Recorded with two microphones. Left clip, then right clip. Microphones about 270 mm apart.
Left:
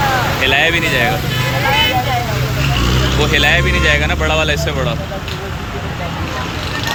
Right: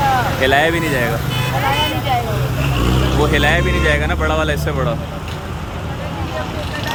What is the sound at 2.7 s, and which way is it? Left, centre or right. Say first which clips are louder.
Vehicle: left 1 dB; right.